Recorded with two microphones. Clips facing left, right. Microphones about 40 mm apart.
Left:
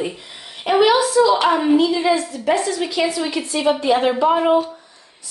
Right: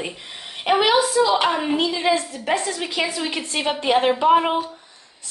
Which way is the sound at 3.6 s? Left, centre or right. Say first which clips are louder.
Left 2 dB; right.